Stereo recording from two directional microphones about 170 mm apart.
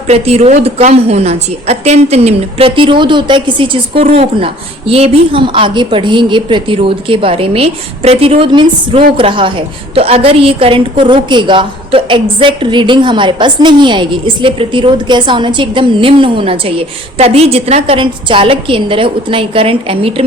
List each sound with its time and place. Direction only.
0.1 s a woman's voice: 40° right (ahead or behind)